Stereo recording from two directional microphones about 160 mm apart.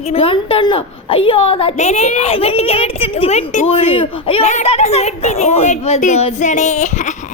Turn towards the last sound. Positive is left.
turn(degrees=50)  # may be behind; listen again after turning